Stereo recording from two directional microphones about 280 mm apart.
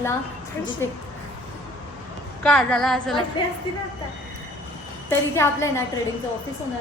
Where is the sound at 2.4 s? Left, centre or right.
Centre.